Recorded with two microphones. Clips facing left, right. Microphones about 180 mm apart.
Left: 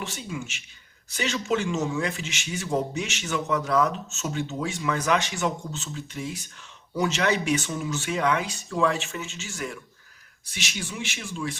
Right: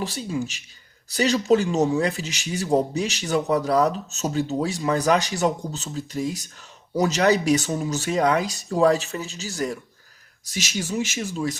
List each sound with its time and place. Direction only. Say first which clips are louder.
0.0 s speech: right 7 dB; 35° right (ahead or behind)